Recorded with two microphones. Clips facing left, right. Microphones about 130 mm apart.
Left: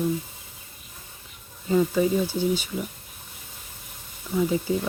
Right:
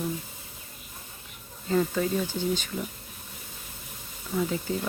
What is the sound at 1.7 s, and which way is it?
Speech, 15° left (ahead or behind).